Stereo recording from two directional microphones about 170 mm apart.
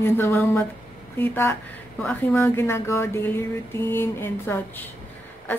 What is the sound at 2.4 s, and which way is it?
A woman's voice, 15° left (ahead or behind).